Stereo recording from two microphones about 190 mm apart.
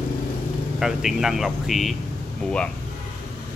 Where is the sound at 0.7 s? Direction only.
Centre (ahead or behind).